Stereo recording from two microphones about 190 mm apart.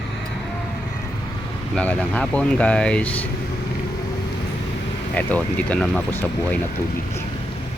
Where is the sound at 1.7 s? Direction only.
5° left (ahead or behind).